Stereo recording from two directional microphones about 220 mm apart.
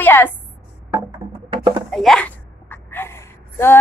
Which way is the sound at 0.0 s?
10° left (ahead or behind).